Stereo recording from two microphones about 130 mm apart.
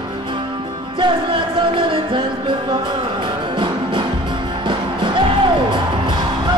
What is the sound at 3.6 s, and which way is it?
Music, 40° right (ahead or behind).